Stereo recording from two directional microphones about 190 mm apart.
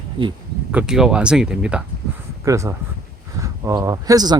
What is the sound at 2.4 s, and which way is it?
Speech, 15° right (ahead or behind).